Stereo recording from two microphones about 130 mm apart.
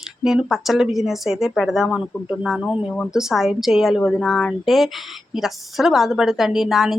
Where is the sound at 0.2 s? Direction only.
5° right (ahead or behind).